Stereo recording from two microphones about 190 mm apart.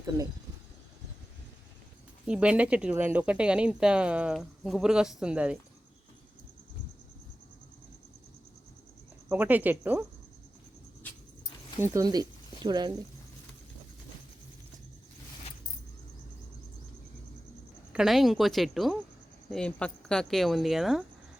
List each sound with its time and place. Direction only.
2.2 s speech: 5° right (ahead or behind)
9.3 s speech: 10° right (ahead or behind)
11.8 s speech: 20° right (ahead or behind)
17.9 s speech: centre (ahead or behind)